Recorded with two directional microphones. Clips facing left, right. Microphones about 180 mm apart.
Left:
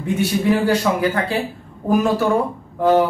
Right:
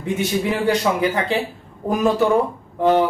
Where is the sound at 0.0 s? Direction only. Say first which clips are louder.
Left 2 dB; 20° right (ahead or behind).